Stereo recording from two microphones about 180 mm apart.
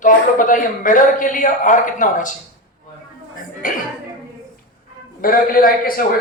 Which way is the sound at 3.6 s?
50° left (ahead or behind).